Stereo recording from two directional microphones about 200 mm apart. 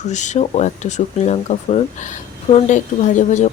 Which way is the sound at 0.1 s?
35° left (ahead or behind).